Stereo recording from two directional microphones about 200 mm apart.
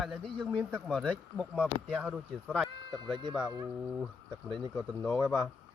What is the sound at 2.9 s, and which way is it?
Speech, 20° right (ahead or behind).